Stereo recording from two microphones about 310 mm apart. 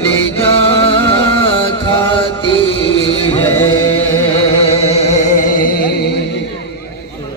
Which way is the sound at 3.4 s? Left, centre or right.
Centre.